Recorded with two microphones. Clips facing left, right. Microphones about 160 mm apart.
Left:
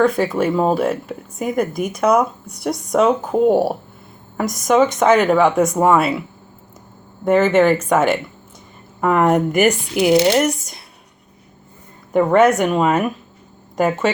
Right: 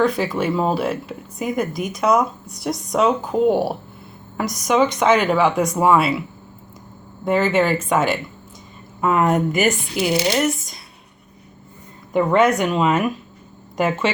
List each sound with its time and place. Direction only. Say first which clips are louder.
0.0 s speech: left 3 dB; 50° left (ahead or behind)
7.3 s speech: left 4 dB; 50° left (ahead or behind)
12.1 s speech: left 3 dB; 50° left (ahead or behind)